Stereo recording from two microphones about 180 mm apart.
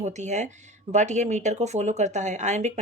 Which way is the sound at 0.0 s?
40° right (ahead or behind).